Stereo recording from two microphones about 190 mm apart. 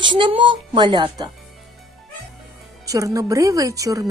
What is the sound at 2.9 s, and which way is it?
A woman's voice, 15° right (ahead or behind).